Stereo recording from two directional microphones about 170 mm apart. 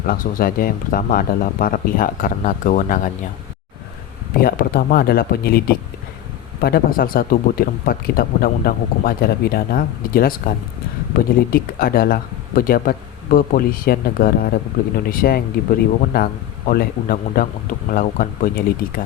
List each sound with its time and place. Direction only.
0.1 s speech: 55° left (ahead or behind)
4.4 s speech: 60° left (ahead or behind)